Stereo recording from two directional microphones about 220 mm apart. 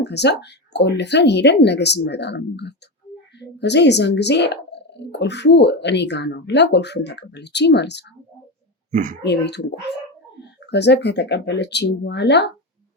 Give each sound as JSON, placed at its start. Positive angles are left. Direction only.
{"t": 0.0, "sound": "speech", "side_deg": 50}
{"t": 8.9, "sound": "speech", "side_deg": -35}
{"t": 9.2, "sound": "speech", "side_deg": 50}